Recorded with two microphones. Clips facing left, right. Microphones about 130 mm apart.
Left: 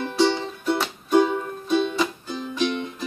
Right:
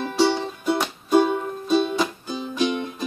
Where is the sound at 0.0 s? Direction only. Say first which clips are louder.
Right 1 dB; 5° right (ahead or behind).